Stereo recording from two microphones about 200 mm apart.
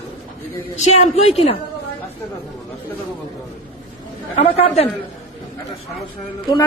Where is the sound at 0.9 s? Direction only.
30° left (ahead or behind).